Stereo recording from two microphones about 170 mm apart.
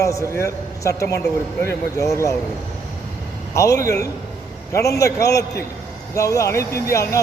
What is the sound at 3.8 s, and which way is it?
A man's voice, 20° left (ahead or behind).